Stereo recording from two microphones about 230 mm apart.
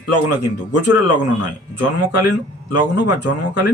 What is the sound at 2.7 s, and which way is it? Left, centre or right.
Speech, left.